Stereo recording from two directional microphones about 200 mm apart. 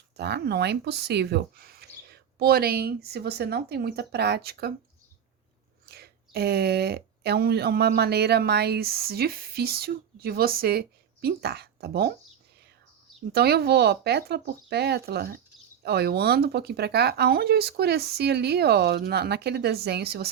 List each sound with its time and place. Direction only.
0.2 s speech: 55° right (ahead or behind)
5.9 s speech: 55° right (ahead or behind)
13.3 s speech: 55° right (ahead or behind)